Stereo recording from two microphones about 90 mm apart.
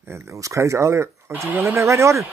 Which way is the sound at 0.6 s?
30° right (ahead or behind).